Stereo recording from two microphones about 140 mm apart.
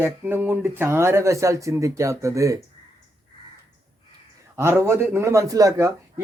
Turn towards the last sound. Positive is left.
turn(degrees=-20)  # may be behind; listen again after turning